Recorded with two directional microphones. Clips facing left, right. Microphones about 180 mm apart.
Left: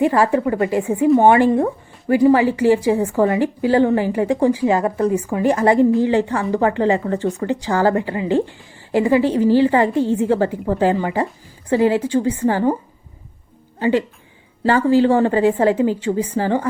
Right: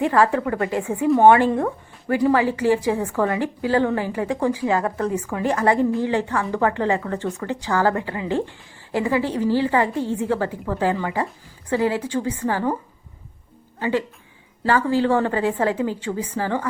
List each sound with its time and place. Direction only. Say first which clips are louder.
0.0 s a woman's voice: left 3 dB; 10° left (ahead or behind)
1.0 s a woman's voice: left 2 dB; centre (ahead or behind)
1.3 s a woman's voice: left 2 dB; 20° left (ahead or behind)
13.7 s a woman's voice: left 5 dB; 25° left (ahead or behind)